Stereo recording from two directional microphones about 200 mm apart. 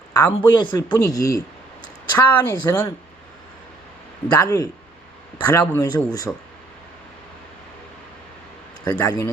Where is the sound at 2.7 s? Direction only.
15° left (ahead or behind).